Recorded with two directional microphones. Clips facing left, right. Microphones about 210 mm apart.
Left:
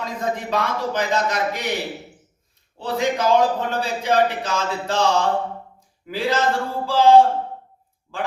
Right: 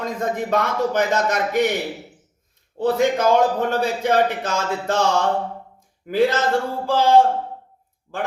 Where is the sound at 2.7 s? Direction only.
45° right (ahead or behind).